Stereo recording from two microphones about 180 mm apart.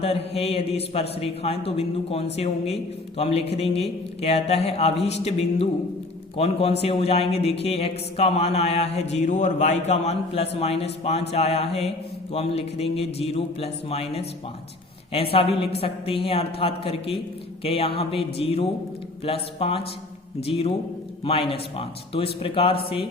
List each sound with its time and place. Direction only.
0.0 s speech: 35° left (ahead or behind)